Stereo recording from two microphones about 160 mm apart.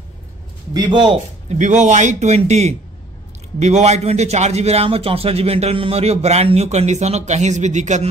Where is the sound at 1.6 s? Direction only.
50° right (ahead or behind).